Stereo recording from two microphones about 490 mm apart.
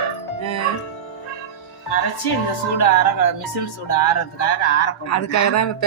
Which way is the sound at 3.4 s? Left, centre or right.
Left.